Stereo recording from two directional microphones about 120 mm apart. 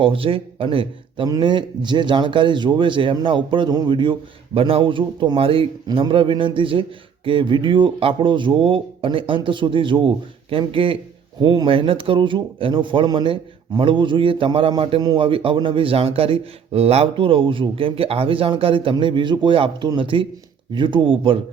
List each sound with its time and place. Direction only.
0.0 s a man's voice: 45° right (ahead or behind)